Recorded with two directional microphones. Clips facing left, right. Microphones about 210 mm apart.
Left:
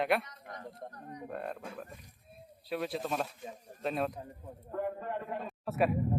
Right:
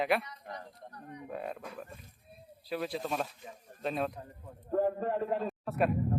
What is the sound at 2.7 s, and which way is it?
A man's voice, centre (ahead or behind).